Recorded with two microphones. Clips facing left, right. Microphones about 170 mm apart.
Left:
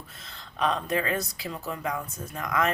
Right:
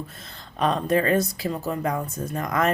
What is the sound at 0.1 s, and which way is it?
Speech, 45° right (ahead or behind).